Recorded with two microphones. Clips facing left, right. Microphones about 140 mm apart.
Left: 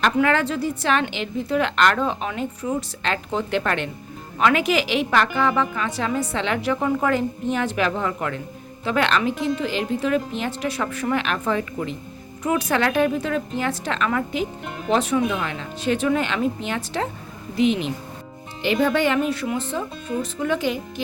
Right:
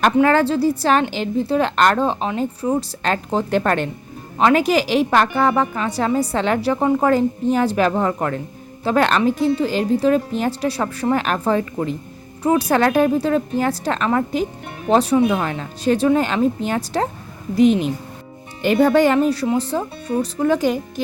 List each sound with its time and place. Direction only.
0.2 s a woman's voice: 35° right (ahead or behind)